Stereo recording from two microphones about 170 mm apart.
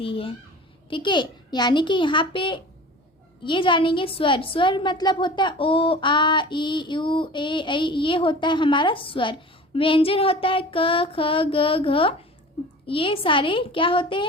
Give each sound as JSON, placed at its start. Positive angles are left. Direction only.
{"t": 0.0, "sound": "a child's voice", "side_deg": 30}